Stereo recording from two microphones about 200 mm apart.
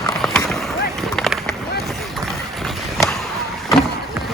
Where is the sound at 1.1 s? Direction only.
Centre (ahead or behind).